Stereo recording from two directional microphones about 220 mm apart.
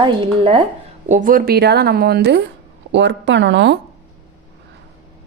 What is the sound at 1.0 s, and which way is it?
Speech, 35° right (ahead or behind).